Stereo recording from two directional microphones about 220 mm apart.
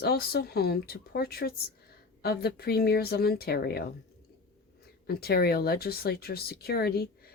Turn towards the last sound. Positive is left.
turn(degrees=45)  # may be behind; listen again after turning